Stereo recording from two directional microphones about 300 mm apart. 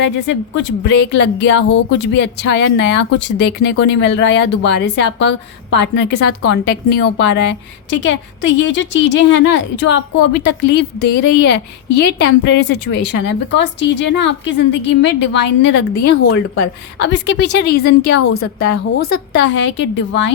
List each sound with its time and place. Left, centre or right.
0.3 s speech: left
17.0 s speech: left